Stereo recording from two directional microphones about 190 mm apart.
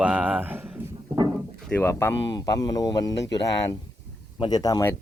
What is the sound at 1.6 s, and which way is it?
Didgeridoo, 10° left (ahead or behind).